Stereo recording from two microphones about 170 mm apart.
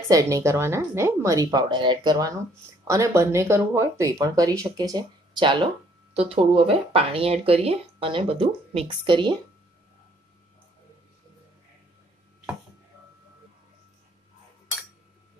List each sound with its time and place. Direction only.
0.1 s speech: 20° right (ahead or behind)